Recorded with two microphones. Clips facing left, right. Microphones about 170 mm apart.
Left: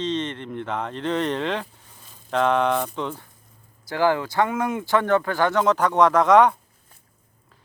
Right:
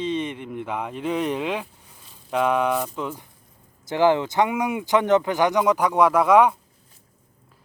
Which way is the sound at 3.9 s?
20° right (ahead or behind).